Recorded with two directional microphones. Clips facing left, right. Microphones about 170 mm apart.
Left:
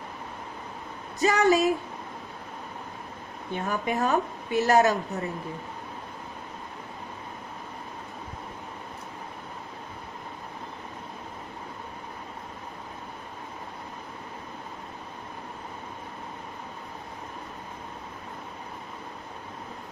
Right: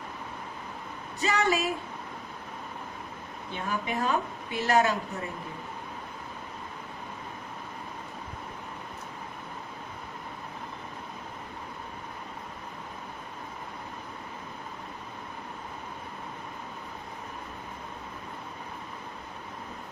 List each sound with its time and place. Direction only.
1.2 s a woman's voice: 40° left (ahead or behind)
3.5 s a woman's voice: 45° left (ahead or behind)